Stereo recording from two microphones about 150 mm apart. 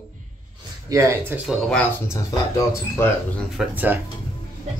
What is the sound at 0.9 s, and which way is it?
Speech, 20° right (ahead or behind).